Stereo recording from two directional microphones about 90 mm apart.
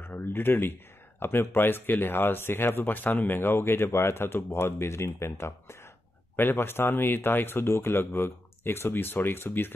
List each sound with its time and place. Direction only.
0.0 s speech: 25° left (ahead or behind)